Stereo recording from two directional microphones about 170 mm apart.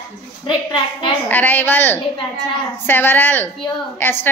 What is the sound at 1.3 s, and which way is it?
A woman's voice, 10° left (ahead or behind).